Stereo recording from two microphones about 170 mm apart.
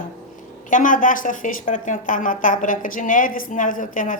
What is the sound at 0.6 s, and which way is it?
A woman's voice, 50° left (ahead or behind).